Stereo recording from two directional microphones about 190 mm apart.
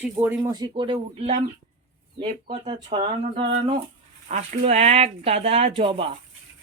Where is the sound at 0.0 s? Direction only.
10° right (ahead or behind).